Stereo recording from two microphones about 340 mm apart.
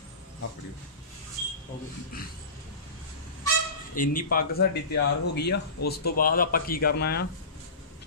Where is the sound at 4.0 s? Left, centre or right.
Left.